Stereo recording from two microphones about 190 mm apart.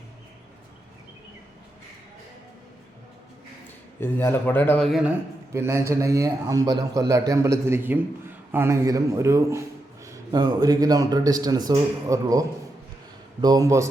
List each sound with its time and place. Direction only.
4.0 s speech: 10° left (ahead or behind)
5.5 s a man's voice: 15° right (ahead or behind)